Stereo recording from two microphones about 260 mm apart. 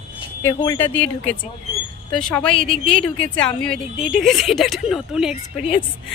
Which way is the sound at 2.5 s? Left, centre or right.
Left.